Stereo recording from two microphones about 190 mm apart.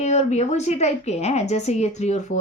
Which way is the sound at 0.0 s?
35° left (ahead or behind).